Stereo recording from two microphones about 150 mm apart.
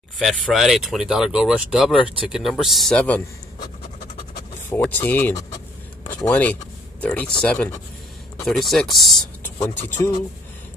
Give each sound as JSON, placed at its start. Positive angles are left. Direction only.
{"t": 0.2, "sound": "speech", "side_deg": 0}
{"t": 4.8, "sound": "speech", "side_deg": 10}
{"t": 9.4, "sound": "speech", "side_deg": 15}